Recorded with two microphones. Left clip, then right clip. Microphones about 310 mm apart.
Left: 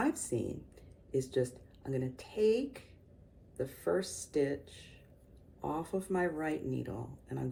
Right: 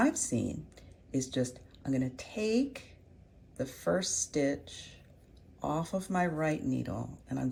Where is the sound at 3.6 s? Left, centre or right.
Centre.